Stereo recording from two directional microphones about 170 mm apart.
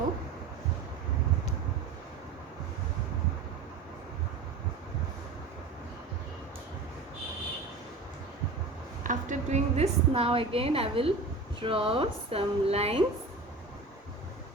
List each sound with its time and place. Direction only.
9.0 s a woman's voice: 45° right (ahead or behind)